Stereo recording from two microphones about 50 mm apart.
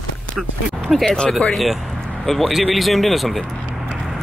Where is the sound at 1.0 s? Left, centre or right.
Centre.